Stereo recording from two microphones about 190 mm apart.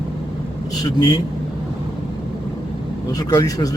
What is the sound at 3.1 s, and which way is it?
Speech, 20° left (ahead or behind).